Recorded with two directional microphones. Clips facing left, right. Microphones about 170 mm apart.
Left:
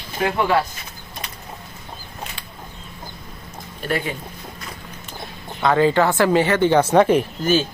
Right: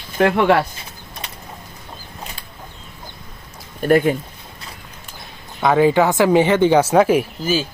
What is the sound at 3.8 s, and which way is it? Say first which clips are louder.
Speech: right 10 dB; 50° right (ahead or behind).